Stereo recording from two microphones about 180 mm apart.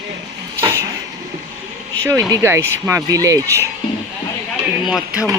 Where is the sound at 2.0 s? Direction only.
20° right (ahead or behind).